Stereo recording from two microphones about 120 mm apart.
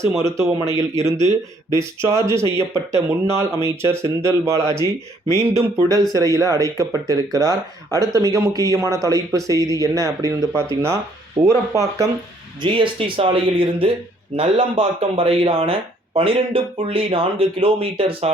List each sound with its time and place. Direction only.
0.2 s speech: 25° right (ahead or behind)
12.6 s speech: 45° right (ahead or behind)